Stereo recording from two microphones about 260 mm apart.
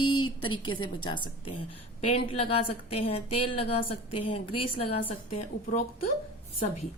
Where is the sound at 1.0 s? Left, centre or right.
Centre.